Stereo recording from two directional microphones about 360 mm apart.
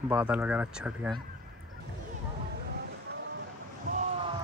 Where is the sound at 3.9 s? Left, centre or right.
Centre.